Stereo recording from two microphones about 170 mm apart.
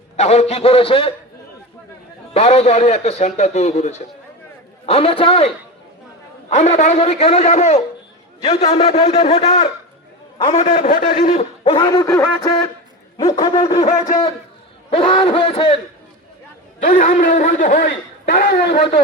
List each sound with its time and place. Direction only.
0.2 s a man's voice: 40° left (ahead or behind)
2.3 s a man's voice: 40° left (ahead or behind)
6.5 s a man's voice: 45° left (ahead or behind)
11.3 s a sound: 30° left (ahead or behind)
14.8 s a man's voice: 35° left (ahead or behind)
16.8 s a man's voice: 50° left (ahead or behind)
17.8 s a man's voice: 70° left (ahead or behind)